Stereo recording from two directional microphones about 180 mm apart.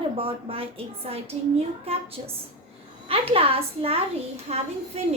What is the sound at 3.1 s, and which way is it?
A woman's voice, 35° right (ahead or behind).